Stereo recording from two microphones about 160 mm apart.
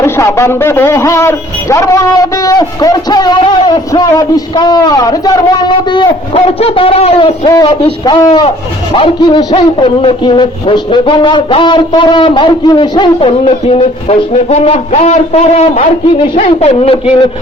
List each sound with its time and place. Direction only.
0.0 s speech: 15° left (ahead or behind); by 7.5 s 35° left (ahead or behind)
7.5 s a man's voice: 25° left (ahead or behind); by 15.9 s 50° left (ahead or behind)
16.1 s a man's voice: 35° left (ahead or behind)